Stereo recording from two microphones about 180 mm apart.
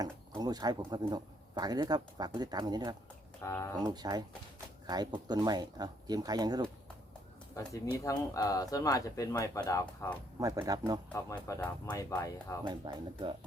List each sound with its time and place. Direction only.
0.0 s speech: 20° right (ahead or behind)
3.4 s speech: 15° left (ahead or behind)
3.8 s speech: 20° right (ahead or behind)
5.3 s speech: 20° right (ahead or behind)
7.9 s speech: 20° left (ahead or behind)
9.8 s speech: 5° left (ahead or behind)
10.4 s speech: 20° right (ahead or behind)
11.1 s speech: 15° left (ahead or behind)
12.6 s speech: 25° right (ahead or behind)